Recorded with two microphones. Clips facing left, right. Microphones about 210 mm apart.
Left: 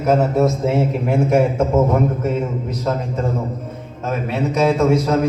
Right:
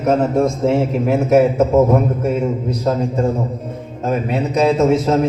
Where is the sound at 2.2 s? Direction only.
15° right (ahead or behind).